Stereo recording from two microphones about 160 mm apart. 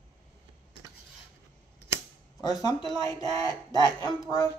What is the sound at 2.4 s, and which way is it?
Speech, 25° left (ahead or behind).